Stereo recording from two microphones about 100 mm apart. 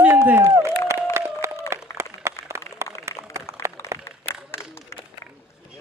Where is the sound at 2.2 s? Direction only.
25° right (ahead or behind).